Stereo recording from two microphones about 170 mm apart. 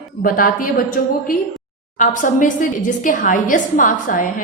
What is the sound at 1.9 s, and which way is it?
A woman's voice, 50° left (ahead or behind).